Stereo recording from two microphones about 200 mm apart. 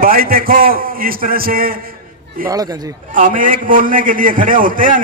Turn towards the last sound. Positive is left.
turn(degrees=-45)  # may be behind; listen again after turning